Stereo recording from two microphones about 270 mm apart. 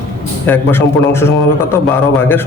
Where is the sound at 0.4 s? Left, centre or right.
Centre.